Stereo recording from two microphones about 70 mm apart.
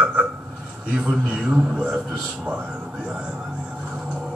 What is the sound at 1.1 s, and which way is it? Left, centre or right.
Speech, centre.